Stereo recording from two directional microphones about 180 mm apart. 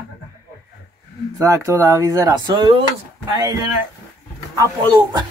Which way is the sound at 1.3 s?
15° right (ahead or behind).